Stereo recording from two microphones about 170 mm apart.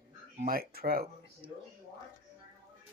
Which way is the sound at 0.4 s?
60° right (ahead or behind).